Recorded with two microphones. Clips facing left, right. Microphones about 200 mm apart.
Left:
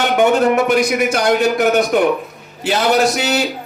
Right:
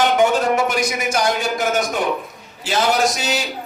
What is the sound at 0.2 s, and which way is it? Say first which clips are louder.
Speech: left 4 dB; 60° left (ahead or behind).